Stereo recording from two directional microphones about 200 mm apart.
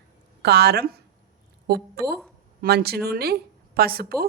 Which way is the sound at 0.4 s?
55° right (ahead or behind).